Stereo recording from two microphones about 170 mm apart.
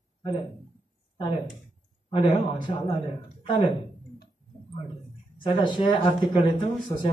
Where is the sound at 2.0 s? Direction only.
30° left (ahead or behind).